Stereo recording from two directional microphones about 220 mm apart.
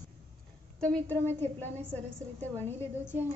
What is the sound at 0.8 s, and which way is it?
A woman's voice, 5° left (ahead or behind).